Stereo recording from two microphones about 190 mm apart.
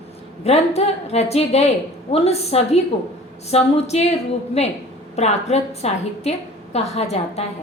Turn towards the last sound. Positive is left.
turn(degrees=35)  # may be behind; listen again after turning